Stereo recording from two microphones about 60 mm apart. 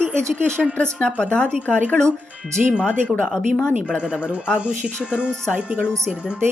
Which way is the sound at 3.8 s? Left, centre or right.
Centre.